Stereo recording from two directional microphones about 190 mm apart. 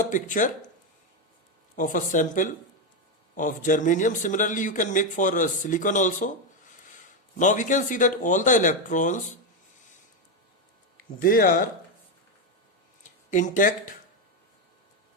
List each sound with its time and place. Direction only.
0.0 s speech: 45° left (ahead or behind)
1.7 s speech: 45° left (ahead or behind)
7.3 s speech: 40° left (ahead or behind)
11.2 s speech: 50° left (ahead or behind)
13.0 s a sound: 40° left (ahead or behind)